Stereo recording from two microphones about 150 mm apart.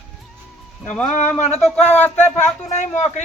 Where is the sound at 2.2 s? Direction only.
50° left (ahead or behind).